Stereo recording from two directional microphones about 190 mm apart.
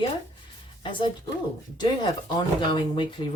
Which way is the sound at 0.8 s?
25° left (ahead or behind).